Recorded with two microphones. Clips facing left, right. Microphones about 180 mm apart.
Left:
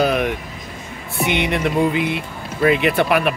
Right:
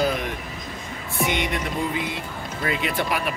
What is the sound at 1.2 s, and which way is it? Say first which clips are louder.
Speech: left 8 dB; 70° left (ahead or behind).